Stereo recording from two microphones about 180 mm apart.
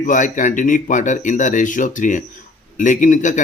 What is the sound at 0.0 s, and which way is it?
Speech, 45° left (ahead or behind).